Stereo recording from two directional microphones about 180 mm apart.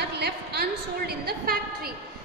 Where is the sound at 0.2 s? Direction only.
60° right (ahead or behind).